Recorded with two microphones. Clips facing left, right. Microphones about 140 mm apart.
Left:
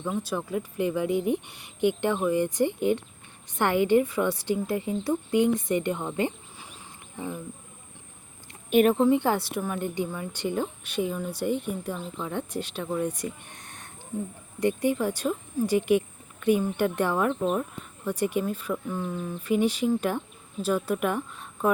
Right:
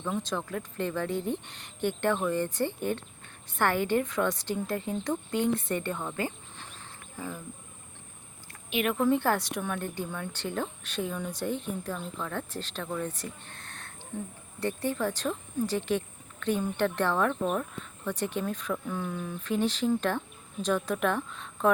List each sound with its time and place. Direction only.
0.0 s speech: 10° left (ahead or behind)
8.7 s speech: 40° left (ahead or behind)
9.0 s speech: 15° left (ahead or behind)